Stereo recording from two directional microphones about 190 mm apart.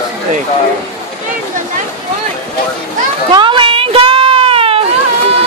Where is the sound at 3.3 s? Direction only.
25° right (ahead or behind).